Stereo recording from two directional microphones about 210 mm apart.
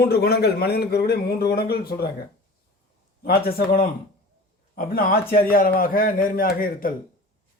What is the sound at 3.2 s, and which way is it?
A man's voice, 45° left (ahead or behind).